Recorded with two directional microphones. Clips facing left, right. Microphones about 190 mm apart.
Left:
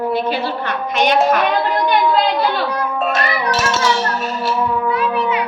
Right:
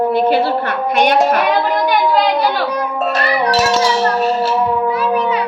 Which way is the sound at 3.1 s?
35° right (ahead or behind).